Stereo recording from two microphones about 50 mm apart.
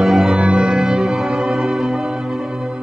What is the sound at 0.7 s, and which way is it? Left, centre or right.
Music, centre.